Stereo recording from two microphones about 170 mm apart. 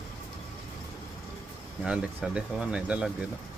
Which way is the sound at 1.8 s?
5° right (ahead or behind).